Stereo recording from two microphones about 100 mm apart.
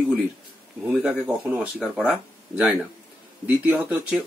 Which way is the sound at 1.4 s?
15° right (ahead or behind).